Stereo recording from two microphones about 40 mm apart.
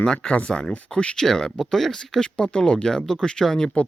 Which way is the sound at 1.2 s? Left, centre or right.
Centre.